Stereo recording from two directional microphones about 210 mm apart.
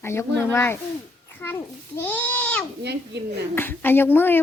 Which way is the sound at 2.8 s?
55° right (ahead or behind).